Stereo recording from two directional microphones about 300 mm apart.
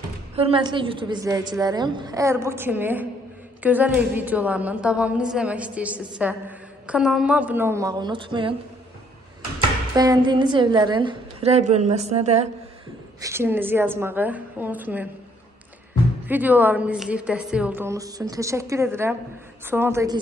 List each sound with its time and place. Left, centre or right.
0.4 s a woman's voice: centre
9.9 s a woman's voice: centre
13.2 s a woman's voice: centre
16.3 s a woman's voice: centre